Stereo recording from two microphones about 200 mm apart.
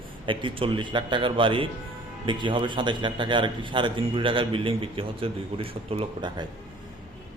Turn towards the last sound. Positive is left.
turn(degrees=-25)  # may be behind; listen again after turning